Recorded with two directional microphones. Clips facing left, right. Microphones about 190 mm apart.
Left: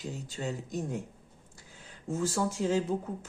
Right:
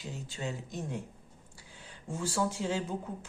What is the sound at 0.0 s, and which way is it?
Speech, 40° left (ahead or behind).